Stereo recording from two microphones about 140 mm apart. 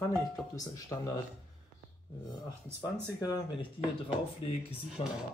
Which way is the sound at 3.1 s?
25° left (ahead or behind).